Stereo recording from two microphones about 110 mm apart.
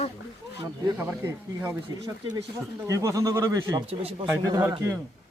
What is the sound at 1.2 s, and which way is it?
Speech, 20° right (ahead or behind).